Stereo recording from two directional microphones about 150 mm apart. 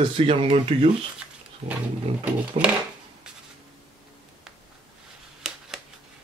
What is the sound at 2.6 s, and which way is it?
Speech, 50° right (ahead or behind).